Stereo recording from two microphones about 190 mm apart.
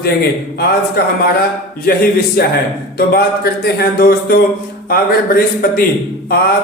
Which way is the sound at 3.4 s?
55° left (ahead or behind).